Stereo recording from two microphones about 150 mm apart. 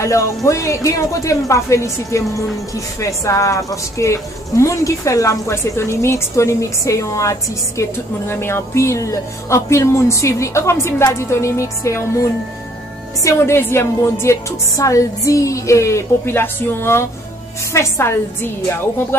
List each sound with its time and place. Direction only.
0.0 s a woman's voice: 20° left (ahead or behind)